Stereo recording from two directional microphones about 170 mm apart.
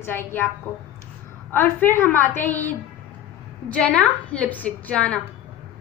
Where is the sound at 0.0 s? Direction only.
10° left (ahead or behind).